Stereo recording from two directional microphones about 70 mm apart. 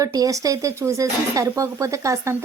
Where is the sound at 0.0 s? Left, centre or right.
Right.